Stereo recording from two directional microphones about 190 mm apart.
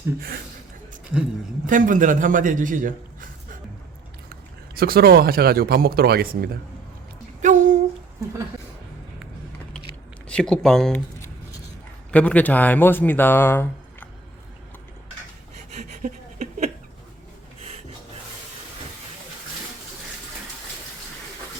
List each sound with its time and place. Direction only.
1.6 s a man's voice: 45° right (ahead or behind)
7.4 s speech: 40° right (ahead or behind)
10.2 s speech: 5° left (ahead or behind)
15.8 s a sound: 40° right (ahead or behind)